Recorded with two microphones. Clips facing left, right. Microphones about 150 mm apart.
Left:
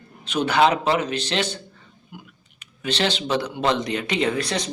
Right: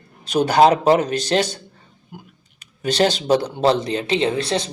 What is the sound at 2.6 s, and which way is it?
Speech, 40° right (ahead or behind).